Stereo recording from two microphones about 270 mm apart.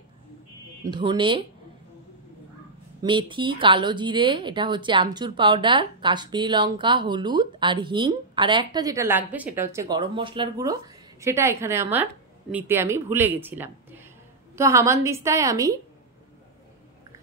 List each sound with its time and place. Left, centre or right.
0.8 s speech: centre
3.0 s speech: centre